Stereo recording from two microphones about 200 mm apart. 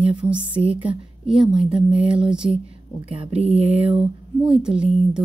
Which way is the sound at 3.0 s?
30° right (ahead or behind).